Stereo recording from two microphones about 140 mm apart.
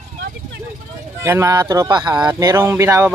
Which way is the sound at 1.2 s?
15° right (ahead or behind).